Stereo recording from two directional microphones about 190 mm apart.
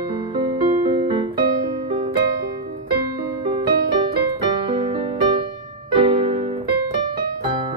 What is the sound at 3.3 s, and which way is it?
Music, 25° right (ahead or behind).